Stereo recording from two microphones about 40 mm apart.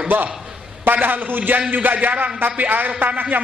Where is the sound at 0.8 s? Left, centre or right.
Right.